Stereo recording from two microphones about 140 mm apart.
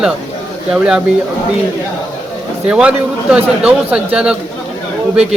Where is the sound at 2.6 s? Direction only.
10° right (ahead or behind).